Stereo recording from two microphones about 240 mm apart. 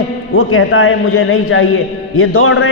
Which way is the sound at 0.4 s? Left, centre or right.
Left.